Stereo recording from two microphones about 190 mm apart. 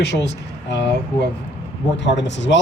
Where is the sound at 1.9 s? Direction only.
65° left (ahead or behind).